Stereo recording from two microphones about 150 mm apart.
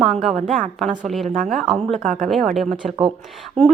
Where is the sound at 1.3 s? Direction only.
60° right (ahead or behind).